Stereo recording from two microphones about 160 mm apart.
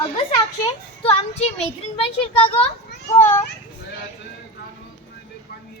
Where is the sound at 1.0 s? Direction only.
40° left (ahead or behind).